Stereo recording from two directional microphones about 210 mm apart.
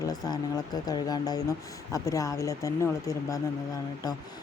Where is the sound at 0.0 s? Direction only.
20° left (ahead or behind).